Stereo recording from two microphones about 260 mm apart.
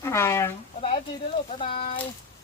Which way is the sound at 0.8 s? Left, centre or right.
Left.